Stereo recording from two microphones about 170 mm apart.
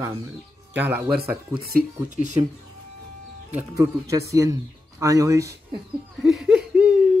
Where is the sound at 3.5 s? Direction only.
20° right (ahead or behind).